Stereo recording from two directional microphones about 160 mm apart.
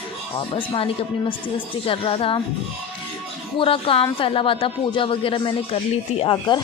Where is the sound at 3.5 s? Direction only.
35° left (ahead or behind).